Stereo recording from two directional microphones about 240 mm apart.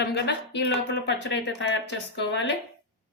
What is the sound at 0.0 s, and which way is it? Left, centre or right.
Speech, left.